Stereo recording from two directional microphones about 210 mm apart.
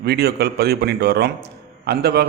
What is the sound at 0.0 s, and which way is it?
A man's voice, 50° right (ahead or behind).